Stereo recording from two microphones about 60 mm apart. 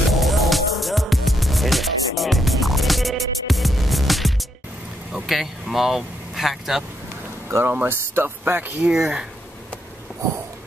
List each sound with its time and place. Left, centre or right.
0.1 s music: centre
5.1 s speech: centre
7.4 s speech: right
8.8 s speech: centre